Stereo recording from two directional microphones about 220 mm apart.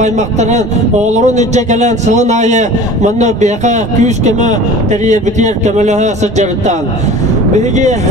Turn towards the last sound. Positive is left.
turn(degrees=-30)  # may be behind; listen again after turning